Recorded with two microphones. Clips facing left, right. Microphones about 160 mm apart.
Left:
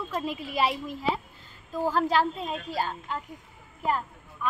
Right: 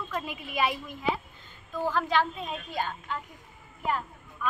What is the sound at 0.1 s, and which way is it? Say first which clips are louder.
A woman's voice: left 4 dB; 30° left (ahead or behind).